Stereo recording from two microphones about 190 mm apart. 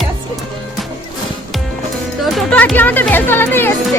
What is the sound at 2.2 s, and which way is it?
Speech, 5° left (ahead or behind).